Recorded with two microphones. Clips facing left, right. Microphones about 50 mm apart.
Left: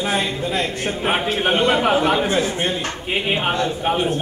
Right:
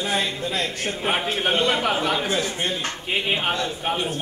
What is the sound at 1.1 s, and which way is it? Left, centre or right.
A man's voice, centre.